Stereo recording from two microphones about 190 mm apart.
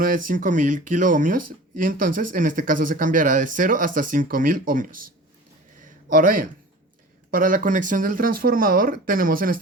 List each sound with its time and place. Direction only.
0.0 s speech: 45° right (ahead or behind)
5.8 s a sound: 45° right (ahead or behind)
7.3 s speech: 45° right (ahead or behind)